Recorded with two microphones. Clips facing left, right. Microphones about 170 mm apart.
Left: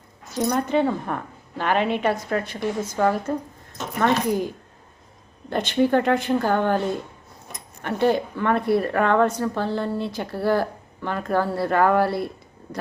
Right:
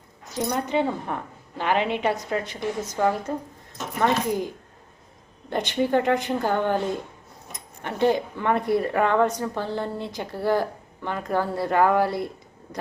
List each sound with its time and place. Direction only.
0.4 s a woman's voice: 15° right (ahead or behind)